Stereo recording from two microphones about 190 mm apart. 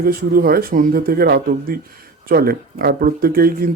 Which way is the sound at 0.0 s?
50° right (ahead or behind).